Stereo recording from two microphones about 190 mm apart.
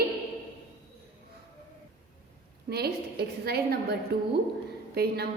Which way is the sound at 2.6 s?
55° right (ahead or behind).